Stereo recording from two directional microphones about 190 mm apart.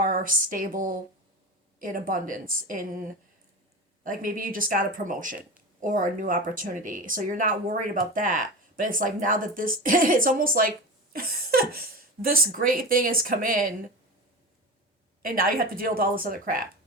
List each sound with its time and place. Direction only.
0.0 s speech: 45° right (ahead or behind)
4.0 s speech: 45° right (ahead or behind)
15.2 s speech: 45° right (ahead or behind)